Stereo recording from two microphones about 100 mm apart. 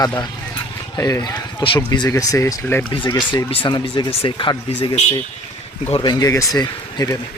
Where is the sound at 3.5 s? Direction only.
55° left (ahead or behind).